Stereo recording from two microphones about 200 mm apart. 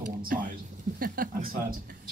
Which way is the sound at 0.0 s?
45° right (ahead or behind).